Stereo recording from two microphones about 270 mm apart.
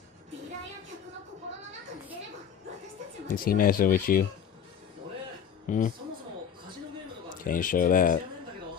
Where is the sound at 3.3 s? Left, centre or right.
Left.